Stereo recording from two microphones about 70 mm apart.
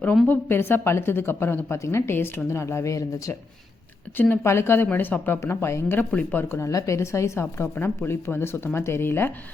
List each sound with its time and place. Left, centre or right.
0.3 s a woman's voice: left
4.4 s a woman's voice: left
6.0 s speech: left
6.5 s a woman's voice: left